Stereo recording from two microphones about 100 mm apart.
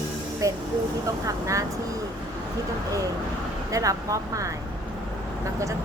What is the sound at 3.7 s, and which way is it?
Speech, 35° right (ahead or behind).